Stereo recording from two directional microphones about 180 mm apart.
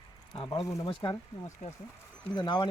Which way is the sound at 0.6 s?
15° left (ahead or behind).